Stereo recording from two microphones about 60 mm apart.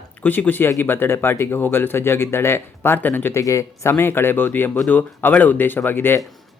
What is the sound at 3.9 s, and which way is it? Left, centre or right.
Speech, left.